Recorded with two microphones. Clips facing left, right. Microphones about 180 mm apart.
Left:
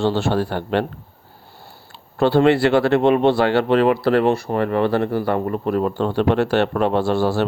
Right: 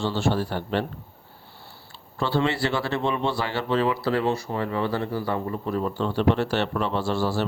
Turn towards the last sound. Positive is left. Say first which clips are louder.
# left 6 dB
turn(degrees=60)  # may be behind; listen again after turning